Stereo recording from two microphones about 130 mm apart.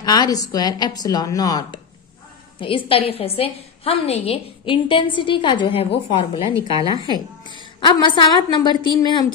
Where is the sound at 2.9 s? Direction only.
50° left (ahead or behind).